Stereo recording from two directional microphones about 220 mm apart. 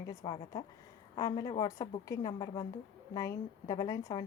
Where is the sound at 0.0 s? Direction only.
15° left (ahead or behind).